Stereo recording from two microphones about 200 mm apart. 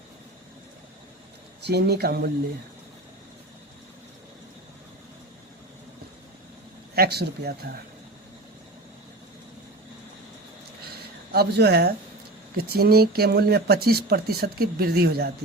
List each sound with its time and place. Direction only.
1.6 s speech: 55° right (ahead or behind)
6.9 s speech: 50° right (ahead or behind)
11.3 s speech: 55° right (ahead or behind)